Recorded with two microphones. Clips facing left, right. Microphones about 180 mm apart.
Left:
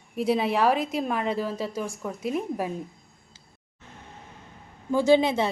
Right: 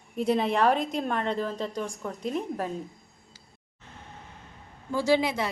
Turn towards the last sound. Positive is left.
turn(degrees=25)  # may be behind; listen again after turning